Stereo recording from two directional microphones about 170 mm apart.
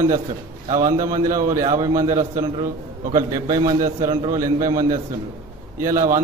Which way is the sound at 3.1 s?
20° right (ahead or behind).